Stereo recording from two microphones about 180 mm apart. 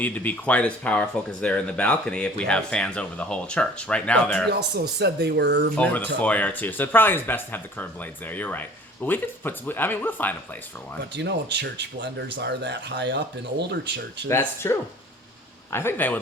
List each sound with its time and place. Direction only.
0.0 s speech: 10° left (ahead or behind)
4.4 s speech: 65° right (ahead or behind)
5.7 s speech: 10° left (ahead or behind)
11.1 s speech: 75° right (ahead or behind)
14.3 s speech: 15° left (ahead or behind)